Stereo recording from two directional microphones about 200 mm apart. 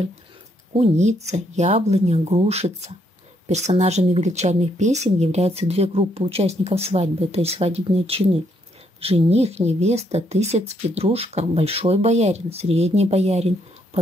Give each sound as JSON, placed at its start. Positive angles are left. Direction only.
{"t": 0.7, "sound": "speech", "side_deg": -35}